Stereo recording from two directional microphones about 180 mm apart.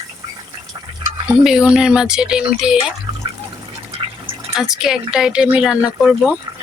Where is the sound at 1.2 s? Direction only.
5° right (ahead or behind).